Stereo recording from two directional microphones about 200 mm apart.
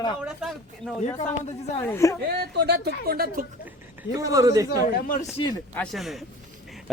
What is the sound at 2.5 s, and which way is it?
Speech, 55° right (ahead or behind).